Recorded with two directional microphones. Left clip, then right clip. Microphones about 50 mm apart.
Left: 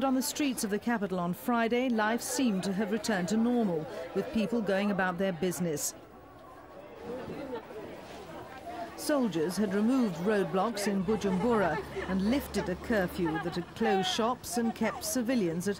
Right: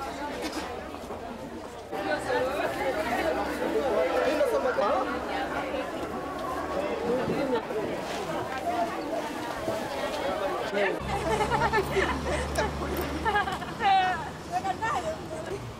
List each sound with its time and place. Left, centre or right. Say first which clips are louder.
3.3 s speech: right 2 dB; right
7.1 s speech: right 8 dB; right
10.0 s speech: right 2 dB; right